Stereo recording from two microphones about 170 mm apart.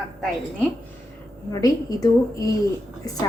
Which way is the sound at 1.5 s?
20° left (ahead or behind).